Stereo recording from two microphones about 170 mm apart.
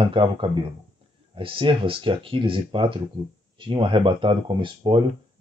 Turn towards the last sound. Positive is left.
turn(degrees=-30)  # may be behind; listen again after turning